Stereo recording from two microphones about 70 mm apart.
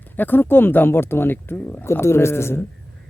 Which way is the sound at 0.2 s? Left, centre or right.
Left.